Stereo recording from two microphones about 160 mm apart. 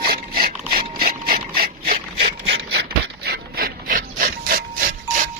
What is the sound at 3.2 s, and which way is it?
Wood, 80° right.